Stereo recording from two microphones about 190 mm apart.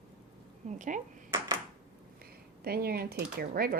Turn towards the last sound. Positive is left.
turn(degrees=-55)  # may be behind; listen again after turning